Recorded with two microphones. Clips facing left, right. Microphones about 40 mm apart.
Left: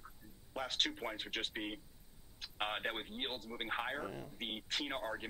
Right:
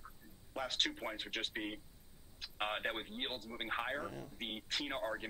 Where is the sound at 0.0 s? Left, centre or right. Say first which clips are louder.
Even; centre.